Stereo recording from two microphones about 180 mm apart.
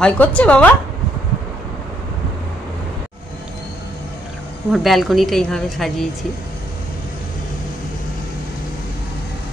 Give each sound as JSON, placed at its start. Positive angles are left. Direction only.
{"t": 0.0, "sound": "a woman's voice", "side_deg": 10}
{"t": 4.7, "sound": "a woman's voice", "side_deg": 0}